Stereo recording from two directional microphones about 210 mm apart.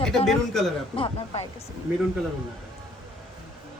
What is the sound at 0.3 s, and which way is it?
Speech, centre (ahead or behind).